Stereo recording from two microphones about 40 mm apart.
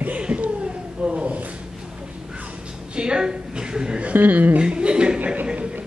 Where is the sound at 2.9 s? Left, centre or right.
Right.